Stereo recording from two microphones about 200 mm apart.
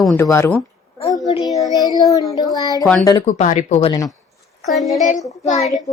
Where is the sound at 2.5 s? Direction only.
20° left (ahead or behind).